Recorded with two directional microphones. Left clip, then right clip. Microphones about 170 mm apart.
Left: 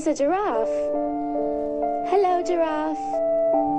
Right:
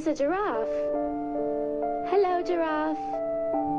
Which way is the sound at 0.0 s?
40° left (ahead or behind).